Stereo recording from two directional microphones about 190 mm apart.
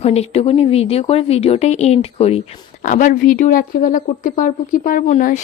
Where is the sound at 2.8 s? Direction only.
45° left (ahead or behind).